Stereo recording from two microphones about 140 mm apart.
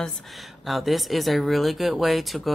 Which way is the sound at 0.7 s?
Centre (ahead or behind).